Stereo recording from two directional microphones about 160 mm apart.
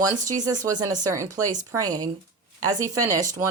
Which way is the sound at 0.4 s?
20° right (ahead or behind).